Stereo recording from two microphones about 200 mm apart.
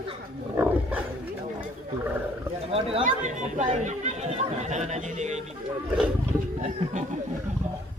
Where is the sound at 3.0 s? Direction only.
40° right (ahead or behind).